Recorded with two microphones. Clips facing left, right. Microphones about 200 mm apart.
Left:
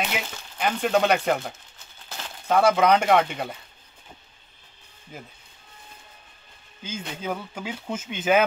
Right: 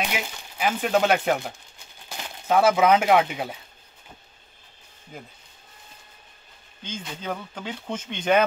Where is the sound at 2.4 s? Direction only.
5° right (ahead or behind).